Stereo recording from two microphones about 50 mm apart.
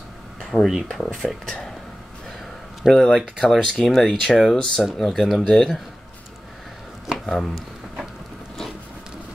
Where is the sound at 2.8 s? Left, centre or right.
Centre.